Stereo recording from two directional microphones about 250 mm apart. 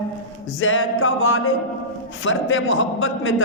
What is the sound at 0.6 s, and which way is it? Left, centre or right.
A man's voice, left.